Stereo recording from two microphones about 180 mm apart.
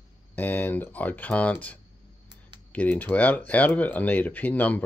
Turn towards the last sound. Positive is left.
turn(degrees=10)  # may be behind; listen again after turning